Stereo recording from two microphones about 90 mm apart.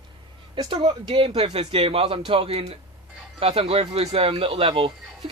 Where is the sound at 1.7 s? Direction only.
90° right.